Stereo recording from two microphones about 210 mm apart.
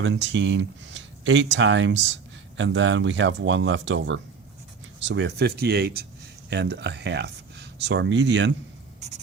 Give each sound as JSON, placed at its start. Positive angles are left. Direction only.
{"t": 0.0, "sound": "speech", "side_deg": -60}
{"t": 9.0, "sound": "writing", "side_deg": -35}